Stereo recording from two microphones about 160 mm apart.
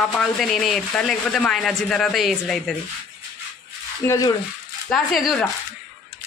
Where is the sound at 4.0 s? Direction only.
20° left (ahead or behind).